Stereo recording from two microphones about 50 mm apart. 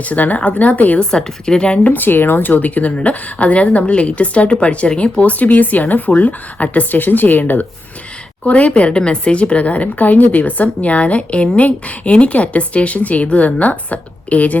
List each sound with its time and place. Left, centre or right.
0.0 s speech: left
0.9 s speech: centre
1.9 s speech: left
8.4 s speech: left